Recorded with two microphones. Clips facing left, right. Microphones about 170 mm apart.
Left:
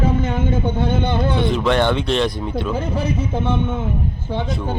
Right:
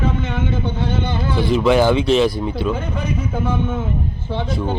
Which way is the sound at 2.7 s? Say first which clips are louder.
Left 2 dB; 35° left (ahead or behind).